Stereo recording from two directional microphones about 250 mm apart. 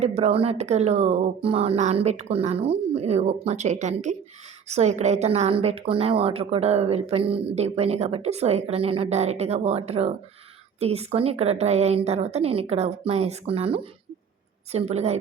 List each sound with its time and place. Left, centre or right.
0.0 s a woman's voice: right